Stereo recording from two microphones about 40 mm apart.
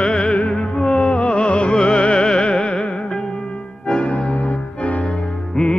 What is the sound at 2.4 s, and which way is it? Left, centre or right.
Music, left.